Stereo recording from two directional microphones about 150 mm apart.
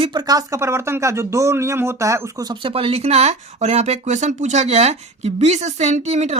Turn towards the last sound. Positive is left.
turn(degrees=-45)  # may be behind; listen again after turning